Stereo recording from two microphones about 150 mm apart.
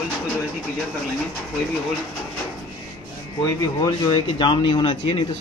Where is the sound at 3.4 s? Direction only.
25° left (ahead or behind).